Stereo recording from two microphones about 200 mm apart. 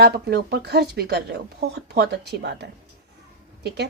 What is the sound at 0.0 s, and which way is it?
Speech, 55° right (ahead or behind).